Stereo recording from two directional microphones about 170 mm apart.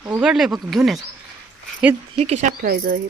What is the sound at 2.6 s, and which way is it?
Speech, 60° right (ahead or behind).